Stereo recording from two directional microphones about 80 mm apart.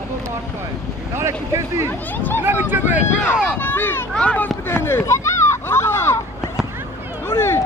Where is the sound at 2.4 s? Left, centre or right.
Right.